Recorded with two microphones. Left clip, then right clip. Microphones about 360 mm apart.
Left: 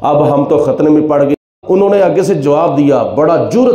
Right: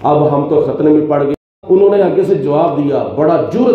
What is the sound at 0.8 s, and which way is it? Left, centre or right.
A man's voice, left.